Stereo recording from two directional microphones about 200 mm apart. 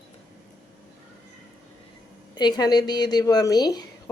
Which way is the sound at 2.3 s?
20° left (ahead or behind).